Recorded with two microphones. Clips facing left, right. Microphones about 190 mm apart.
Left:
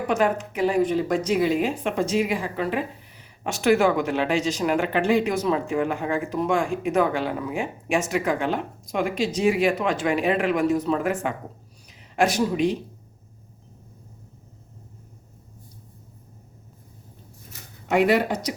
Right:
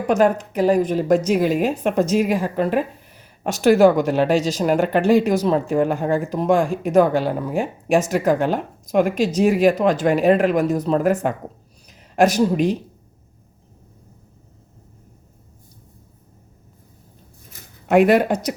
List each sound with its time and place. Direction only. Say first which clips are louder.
0.1 s speech: right 6 dB; 40° right (ahead or behind)
17.8 s speech: right 5 dB; 50° right (ahead or behind)